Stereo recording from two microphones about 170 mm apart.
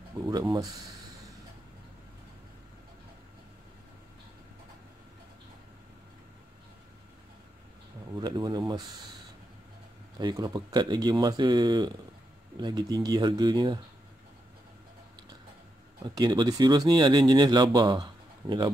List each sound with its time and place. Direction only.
0.2 s speech: 20° right (ahead or behind)
8.1 s speech: 25° right (ahead or behind)
10.1 s speech: 25° right (ahead or behind)
16.0 s speech: 25° right (ahead or behind)